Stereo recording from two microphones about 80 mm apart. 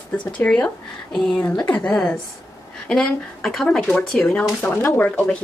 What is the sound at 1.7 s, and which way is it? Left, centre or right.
A woman's voice, centre.